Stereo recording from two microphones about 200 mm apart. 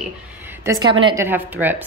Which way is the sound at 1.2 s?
10° right (ahead or behind).